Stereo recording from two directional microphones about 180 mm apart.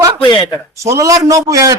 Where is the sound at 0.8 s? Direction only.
15° right (ahead or behind).